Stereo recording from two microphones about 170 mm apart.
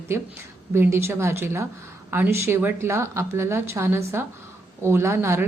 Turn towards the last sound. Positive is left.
turn(degrees=-15)  # may be behind; listen again after turning